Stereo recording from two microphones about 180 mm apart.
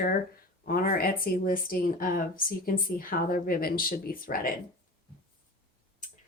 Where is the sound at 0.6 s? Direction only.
55° left (ahead or behind).